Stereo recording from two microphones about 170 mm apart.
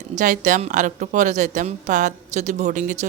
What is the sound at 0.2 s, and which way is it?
Speech, 50° right (ahead or behind).